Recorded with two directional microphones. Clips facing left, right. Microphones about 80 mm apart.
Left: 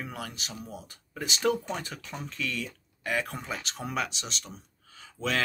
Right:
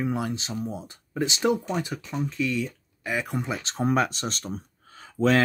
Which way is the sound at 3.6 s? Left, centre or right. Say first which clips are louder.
Right 11 dB; right.